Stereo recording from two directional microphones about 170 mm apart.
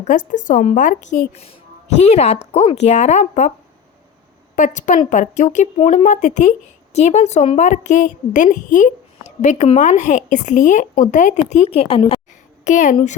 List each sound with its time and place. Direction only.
0.0 s speech: 50° left (ahead or behind)
1.4 s a woman's voice: 40° left (ahead or behind)
4.5 s speech: 50° left (ahead or behind)
12.6 s speech: 45° left (ahead or behind)